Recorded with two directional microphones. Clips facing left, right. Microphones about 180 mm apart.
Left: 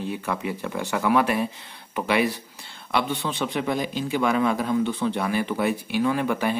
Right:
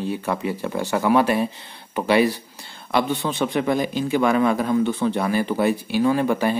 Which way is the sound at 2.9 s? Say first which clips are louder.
Right 4 dB; 45° right (ahead or behind).